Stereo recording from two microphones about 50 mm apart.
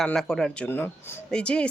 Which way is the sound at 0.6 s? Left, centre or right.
Left.